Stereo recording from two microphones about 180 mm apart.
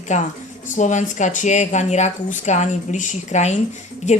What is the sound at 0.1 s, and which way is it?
Speech, 40° left (ahead or behind).